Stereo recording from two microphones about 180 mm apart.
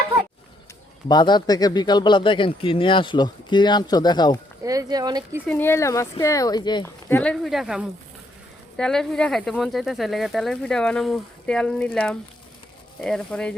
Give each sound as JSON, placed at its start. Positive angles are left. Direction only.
{"t": 1.0, "sound": "speech", "side_deg": 25}
{"t": 4.6, "sound": "speech", "side_deg": -20}
{"t": 5.5, "sound": "speech", "side_deg": 10}
{"t": 7.1, "sound": "speech", "side_deg": 5}